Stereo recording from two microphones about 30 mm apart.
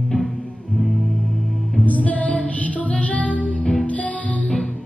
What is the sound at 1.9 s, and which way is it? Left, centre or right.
Music, left.